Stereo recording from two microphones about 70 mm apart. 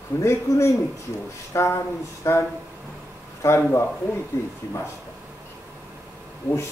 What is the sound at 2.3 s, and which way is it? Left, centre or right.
Speech, left.